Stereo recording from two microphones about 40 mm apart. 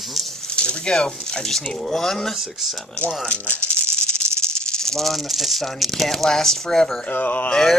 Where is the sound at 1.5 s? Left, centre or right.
Centre.